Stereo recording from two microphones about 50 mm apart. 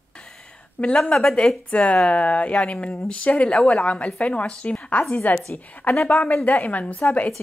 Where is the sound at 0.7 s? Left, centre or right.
Left.